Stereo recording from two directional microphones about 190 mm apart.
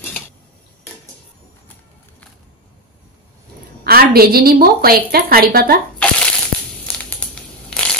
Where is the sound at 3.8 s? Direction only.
55° right (ahead or behind).